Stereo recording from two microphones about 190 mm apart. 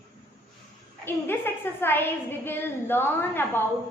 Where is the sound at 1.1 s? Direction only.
10° left (ahead or behind).